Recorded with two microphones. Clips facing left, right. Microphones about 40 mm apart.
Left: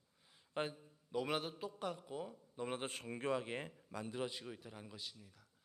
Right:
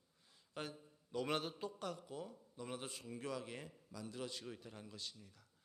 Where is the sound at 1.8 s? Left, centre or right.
Centre.